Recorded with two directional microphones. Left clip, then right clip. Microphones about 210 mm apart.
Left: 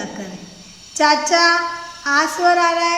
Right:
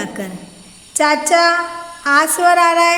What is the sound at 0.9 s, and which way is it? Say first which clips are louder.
Child singing: right 1 dB; 40° right (ahead or behind).